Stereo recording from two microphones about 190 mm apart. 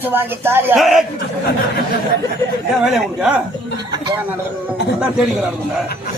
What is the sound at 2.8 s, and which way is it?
Speech, 5° right (ahead or behind).